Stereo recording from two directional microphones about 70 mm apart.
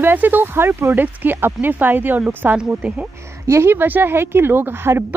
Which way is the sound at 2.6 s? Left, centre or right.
Centre.